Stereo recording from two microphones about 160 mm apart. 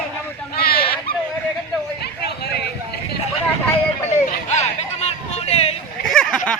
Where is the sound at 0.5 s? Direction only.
75° left (ahead or behind).